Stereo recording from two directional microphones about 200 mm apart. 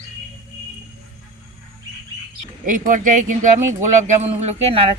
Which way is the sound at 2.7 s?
40° right (ahead or behind).